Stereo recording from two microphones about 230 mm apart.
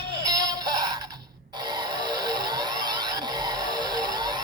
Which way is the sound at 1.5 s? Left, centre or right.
Centre.